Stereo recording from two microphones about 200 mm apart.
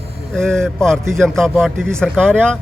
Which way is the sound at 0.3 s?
5° left (ahead or behind).